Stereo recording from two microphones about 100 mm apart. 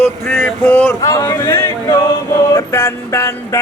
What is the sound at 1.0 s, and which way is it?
Speech, 35° left (ahead or behind).